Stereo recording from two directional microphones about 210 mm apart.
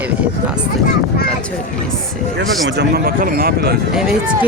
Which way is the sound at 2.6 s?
50° right (ahead or behind).